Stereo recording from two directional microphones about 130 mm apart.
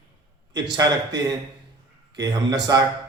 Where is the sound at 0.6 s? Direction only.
30° right (ahead or behind).